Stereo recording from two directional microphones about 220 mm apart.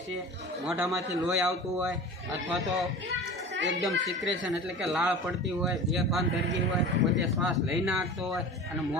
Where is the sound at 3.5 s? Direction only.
55° right (ahead or behind).